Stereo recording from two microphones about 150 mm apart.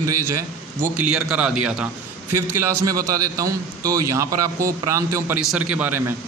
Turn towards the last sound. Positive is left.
turn(degrees=-10)  # may be behind; listen again after turning